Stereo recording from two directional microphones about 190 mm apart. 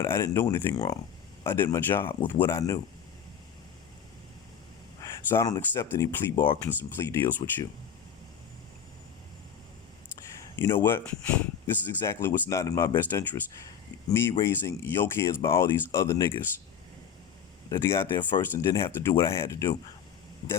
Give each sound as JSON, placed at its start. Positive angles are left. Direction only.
{"t": 0.0, "sound": "speech", "side_deg": 15}
{"t": 5.0, "sound": "speech", "side_deg": 15}
{"t": 10.6, "sound": "speech", "side_deg": 10}
{"t": 17.7, "sound": "speech", "side_deg": 15}